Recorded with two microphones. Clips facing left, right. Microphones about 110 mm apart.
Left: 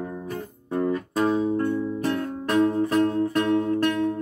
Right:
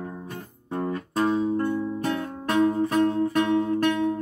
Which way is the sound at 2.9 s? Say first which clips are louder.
Even; centre (ahead or behind).